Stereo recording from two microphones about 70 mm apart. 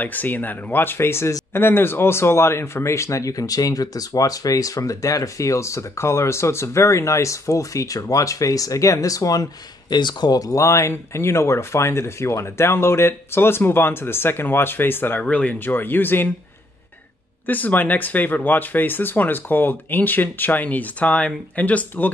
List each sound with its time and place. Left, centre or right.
0.0 s speech: left
17.5 s speech: left